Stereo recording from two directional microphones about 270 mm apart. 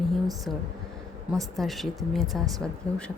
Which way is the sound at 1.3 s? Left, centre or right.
Centre.